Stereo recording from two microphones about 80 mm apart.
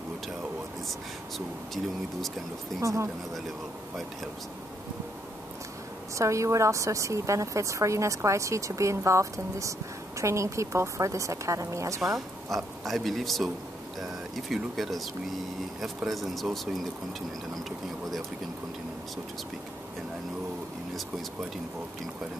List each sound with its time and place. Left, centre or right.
2.8 s a woman's voice: right
6.1 s a woman's voice: right
12.4 s speech: centre
16.1 s speech: centre